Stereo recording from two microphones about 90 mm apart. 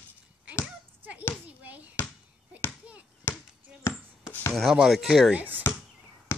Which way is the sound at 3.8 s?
30° left (ahead or behind).